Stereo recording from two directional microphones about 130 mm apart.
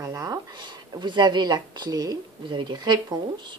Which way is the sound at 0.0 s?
25° right (ahead or behind).